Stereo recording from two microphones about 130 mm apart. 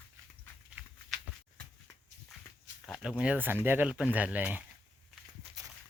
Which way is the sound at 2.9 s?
5° right (ahead or behind).